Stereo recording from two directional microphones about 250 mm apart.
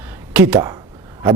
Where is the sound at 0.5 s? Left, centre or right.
Centre.